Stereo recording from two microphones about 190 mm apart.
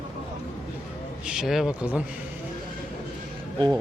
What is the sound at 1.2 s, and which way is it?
Speech, centre (ahead or behind).